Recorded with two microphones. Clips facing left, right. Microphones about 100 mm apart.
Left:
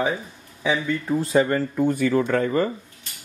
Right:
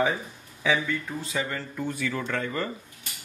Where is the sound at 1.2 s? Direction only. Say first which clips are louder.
Left 11 dB; 45° left (ahead or behind).